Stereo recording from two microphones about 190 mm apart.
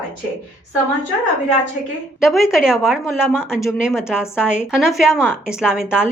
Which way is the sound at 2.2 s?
Centre (ahead or behind).